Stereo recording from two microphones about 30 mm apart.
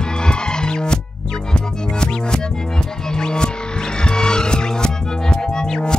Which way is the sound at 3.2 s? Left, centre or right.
Left.